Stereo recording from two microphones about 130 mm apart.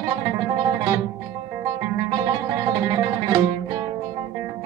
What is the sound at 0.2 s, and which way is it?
Music, 25° right (ahead or behind).